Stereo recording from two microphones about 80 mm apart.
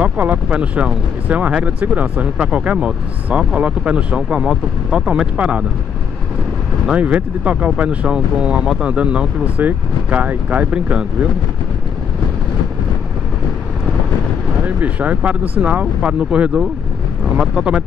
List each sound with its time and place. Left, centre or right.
0.0 s speech: centre
6.9 s speech: centre
14.6 s speech: centre